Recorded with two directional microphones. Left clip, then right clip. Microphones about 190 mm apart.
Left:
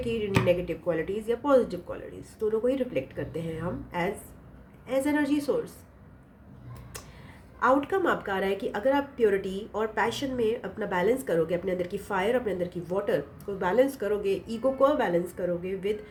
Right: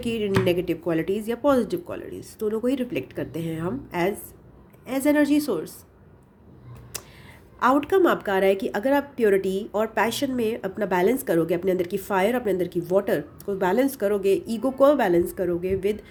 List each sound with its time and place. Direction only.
0.0 s a woman's voice: 55° right (ahead or behind)
7.6 s a woman's voice: 50° right (ahead or behind)